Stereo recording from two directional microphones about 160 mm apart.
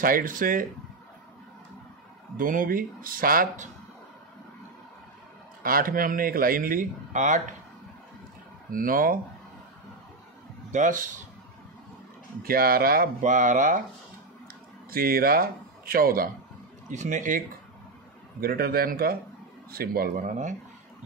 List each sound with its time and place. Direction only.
0.0 s speech: 60° right (ahead or behind)
2.3 s speech: 60° right (ahead or behind)
5.6 s speech: 65° right (ahead or behind)
8.7 s speech: 60° right (ahead or behind)
10.7 s speech: 55° right (ahead or behind)
12.4 s speech: 65° right (ahead or behind)
14.9 s speech: 65° right (ahead or behind)
16.9 s speech: 50° right (ahead or behind)
18.4 s a man's voice: 70° right (ahead or behind); by 20.5 s 50° right (ahead or behind)